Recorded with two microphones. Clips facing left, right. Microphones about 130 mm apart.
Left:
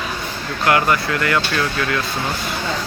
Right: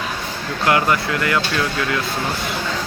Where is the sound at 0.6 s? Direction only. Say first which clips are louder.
Left 1 dB; 20° right (ahead or behind).